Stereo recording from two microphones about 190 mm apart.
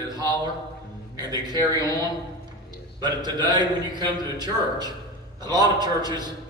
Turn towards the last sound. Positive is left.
turn(degrees=-20)  # may be behind; listen again after turning